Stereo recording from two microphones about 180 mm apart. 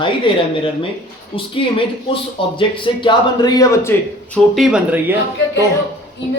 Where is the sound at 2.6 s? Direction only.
30° left (ahead or behind).